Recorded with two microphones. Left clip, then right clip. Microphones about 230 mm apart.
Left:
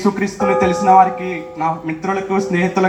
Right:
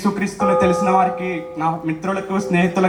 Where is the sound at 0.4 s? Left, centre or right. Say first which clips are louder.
Left 2 dB; right.